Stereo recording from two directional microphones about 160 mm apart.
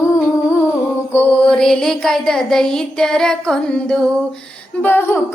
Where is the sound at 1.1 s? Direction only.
10° left (ahead or behind).